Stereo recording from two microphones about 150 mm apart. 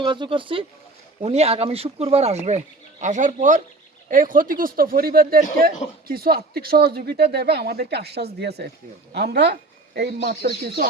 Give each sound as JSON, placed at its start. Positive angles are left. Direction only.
{"t": 0.0, "sound": "speech", "side_deg": -30}
{"t": 4.1, "sound": "speech", "side_deg": -65}